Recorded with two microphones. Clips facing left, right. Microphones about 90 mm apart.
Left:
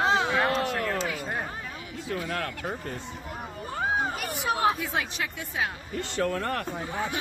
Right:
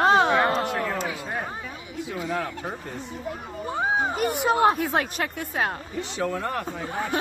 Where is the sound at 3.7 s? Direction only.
15° right (ahead or behind).